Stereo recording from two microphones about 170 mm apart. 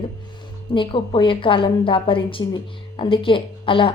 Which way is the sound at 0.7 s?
30° left (ahead or behind).